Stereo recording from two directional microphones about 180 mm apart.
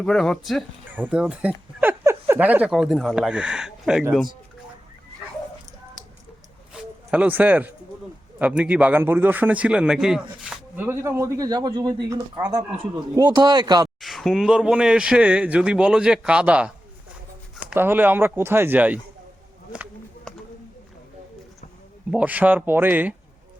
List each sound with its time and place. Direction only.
0.0 s speech: 5° left (ahead or behind)
0.9 s speech: 10° right (ahead or behind)
7.1 s a man's voice: 10° right (ahead or behind)
14.0 s a man's voice: centre (ahead or behind)
22.1 s a man's voice: 10° right (ahead or behind)